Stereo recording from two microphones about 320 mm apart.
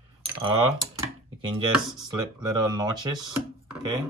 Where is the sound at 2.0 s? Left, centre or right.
Centre.